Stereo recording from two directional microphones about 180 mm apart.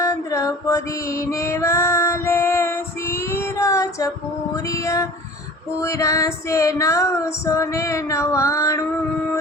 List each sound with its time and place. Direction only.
0.0 s female singing: 20° left (ahead or behind)